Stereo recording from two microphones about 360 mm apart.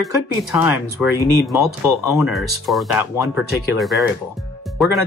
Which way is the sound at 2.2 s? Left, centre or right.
Centre.